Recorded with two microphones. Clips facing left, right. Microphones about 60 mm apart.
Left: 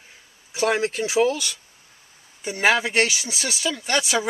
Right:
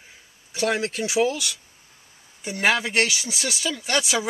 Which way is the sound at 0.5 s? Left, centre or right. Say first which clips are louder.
Left 2 dB; centre.